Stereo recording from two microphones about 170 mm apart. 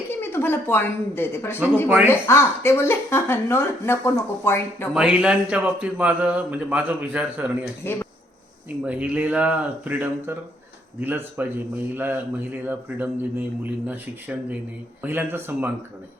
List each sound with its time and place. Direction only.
0.1 s a woman's voice: 15° left (ahead or behind)
4.9 s speech: 5° right (ahead or behind)
7.8 s speech: 15° left (ahead or behind)
8.8 s speech: 10° right (ahead or behind)